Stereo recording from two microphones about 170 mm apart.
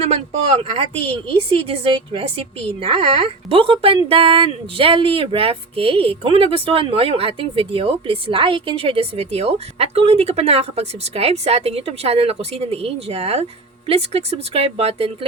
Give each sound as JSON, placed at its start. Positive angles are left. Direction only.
{"t": 0.0, "sound": "speech", "side_deg": -40}